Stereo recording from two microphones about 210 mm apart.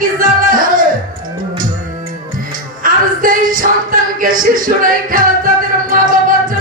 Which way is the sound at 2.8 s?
40° right (ahead or behind).